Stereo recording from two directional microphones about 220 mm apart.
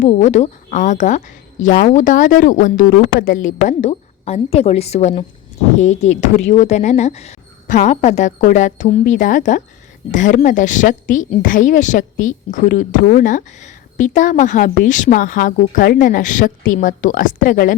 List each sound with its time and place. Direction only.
0.0 s a woman's voice: 30° left (ahead or behind)